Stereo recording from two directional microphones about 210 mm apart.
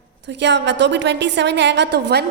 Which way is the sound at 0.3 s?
55° right (ahead or behind).